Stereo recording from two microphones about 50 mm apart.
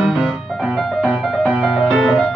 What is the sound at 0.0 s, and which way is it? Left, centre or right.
Music, centre.